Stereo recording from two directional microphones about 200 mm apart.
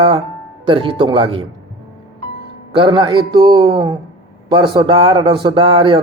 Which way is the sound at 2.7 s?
25° right (ahead or behind).